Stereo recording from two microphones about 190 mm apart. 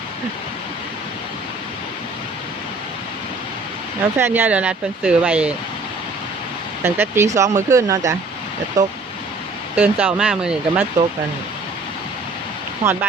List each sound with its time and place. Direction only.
4.2 s speech: 10° right (ahead or behind)
6.8 s speech: 10° right (ahead or behind)
9.7 s speech: 10° right (ahead or behind)
12.8 s speech: 10° right (ahead or behind)